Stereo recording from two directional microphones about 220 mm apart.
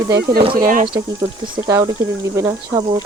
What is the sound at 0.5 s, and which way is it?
Speech, 40° right (ahead or behind).